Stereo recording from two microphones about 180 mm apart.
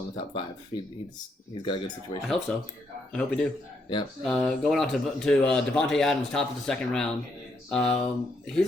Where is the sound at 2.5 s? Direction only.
5° left (ahead or behind).